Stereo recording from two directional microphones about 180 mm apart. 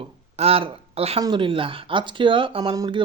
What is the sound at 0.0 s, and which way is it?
Speech, 35° right (ahead or behind).